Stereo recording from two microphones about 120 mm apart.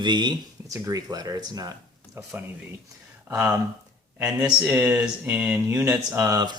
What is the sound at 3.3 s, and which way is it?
Speech, 15° right (ahead or behind).